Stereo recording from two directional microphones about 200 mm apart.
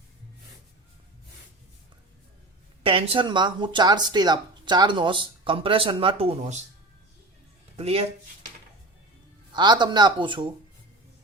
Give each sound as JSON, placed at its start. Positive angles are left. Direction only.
{"t": 2.8, "sound": "speech", "side_deg": -25}
{"t": 7.8, "sound": "speech", "side_deg": -30}
{"t": 9.5, "sound": "speech", "side_deg": -20}